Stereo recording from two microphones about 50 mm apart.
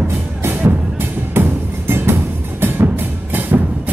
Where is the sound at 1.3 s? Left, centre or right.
Right.